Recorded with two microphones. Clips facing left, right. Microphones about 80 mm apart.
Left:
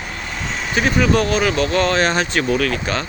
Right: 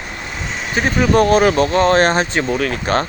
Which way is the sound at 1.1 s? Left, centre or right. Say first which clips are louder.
Right 5 dB; right.